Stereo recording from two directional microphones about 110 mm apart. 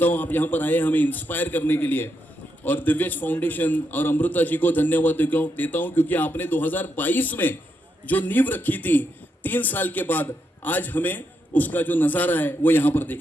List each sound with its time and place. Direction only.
0.0 s a man's voice: 15° left (ahead or behind)